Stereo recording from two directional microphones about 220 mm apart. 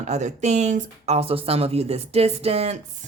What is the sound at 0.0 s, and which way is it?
Speech, 30° right (ahead or behind).